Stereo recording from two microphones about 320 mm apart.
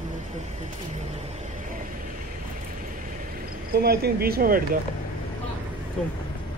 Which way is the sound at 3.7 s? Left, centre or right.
Right.